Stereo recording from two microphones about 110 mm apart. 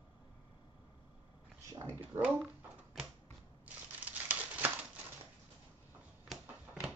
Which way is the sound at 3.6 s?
15° right (ahead or behind).